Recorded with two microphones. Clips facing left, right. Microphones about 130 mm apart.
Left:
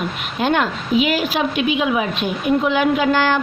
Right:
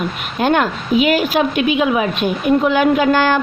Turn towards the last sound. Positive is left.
turn(degrees=-50)  # may be behind; listen again after turning